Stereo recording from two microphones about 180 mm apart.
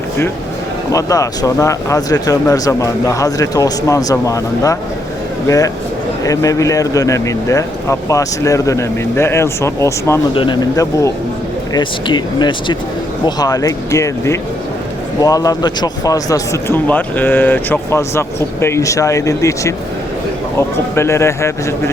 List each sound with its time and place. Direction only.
0.9 s speech: 20° left (ahead or behind)
10.3 s speech: 25° left (ahead or behind)